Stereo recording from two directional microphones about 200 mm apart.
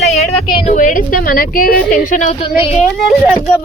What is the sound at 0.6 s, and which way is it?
Speech, 40° left (ahead or behind).